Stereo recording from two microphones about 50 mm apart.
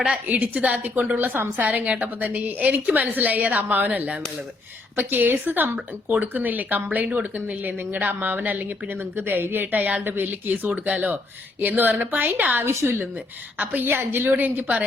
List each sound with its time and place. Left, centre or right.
0.1 s a woman's voice: right
1.2 s a woman's voice: right
1.6 s a woman's voice: right
4.9 s a woman's voice: right
10.7 s a woman's voice: right
12.8 s a woman's voice: right